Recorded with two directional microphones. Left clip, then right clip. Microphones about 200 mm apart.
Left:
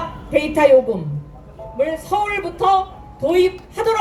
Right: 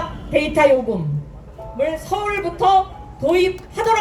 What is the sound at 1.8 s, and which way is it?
A woman's voice, 20° left (ahead or behind).